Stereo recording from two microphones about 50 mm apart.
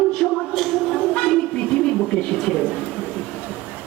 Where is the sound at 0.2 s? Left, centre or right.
Centre.